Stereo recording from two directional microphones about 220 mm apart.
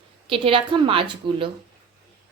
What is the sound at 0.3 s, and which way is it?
A woman's voice, 25° right (ahead or behind).